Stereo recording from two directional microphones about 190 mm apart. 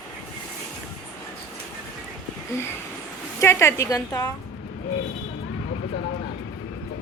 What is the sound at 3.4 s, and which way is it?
Speech, 15° left (ahead or behind).